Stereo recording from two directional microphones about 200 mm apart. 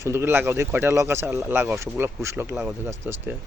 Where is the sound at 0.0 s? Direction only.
15° right (ahead or behind).